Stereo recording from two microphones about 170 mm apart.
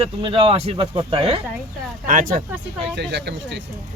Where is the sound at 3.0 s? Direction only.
90° right.